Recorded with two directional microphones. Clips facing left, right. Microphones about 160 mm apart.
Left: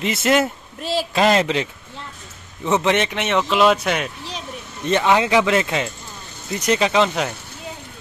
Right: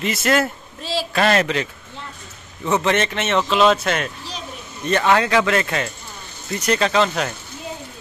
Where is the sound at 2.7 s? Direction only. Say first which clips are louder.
Left 1 dB; 20° left (ahead or behind).